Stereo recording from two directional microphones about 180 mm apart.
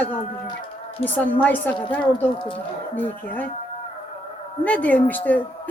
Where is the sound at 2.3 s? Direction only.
25° left (ahead or behind).